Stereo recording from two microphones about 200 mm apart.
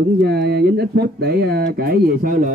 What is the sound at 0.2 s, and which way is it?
A man's voice, 55° right (ahead or behind).